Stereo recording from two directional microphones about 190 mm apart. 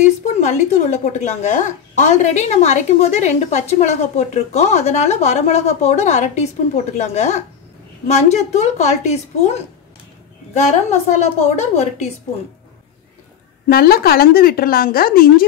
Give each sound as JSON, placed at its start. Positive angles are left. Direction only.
{"t": 0.0, "sound": "speech", "side_deg": 40}
{"t": 13.7, "sound": "a woman's voice", "side_deg": 55}